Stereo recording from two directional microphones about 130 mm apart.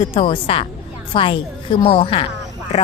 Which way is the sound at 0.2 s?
45° left (ahead or behind).